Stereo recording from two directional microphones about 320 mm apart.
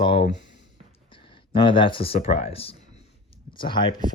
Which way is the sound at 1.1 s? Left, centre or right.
Centre.